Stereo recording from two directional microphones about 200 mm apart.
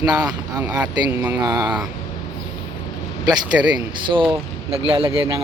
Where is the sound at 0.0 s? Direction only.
20° right (ahead or behind).